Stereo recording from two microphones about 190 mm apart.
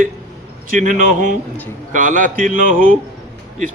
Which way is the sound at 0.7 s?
45° right (ahead or behind).